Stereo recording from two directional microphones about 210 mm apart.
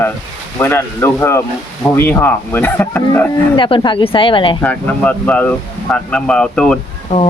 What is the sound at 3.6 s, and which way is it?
Speech, 25° left (ahead or behind).